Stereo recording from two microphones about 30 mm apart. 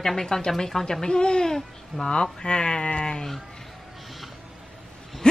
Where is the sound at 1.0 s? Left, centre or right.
Left.